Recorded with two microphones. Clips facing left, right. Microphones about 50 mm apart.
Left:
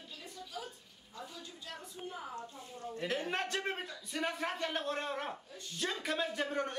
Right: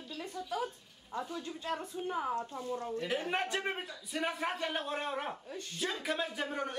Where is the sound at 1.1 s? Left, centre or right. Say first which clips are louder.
Right 9 dB; right.